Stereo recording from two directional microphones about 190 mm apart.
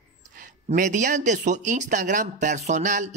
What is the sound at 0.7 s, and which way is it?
Speech, 40° right (ahead or behind).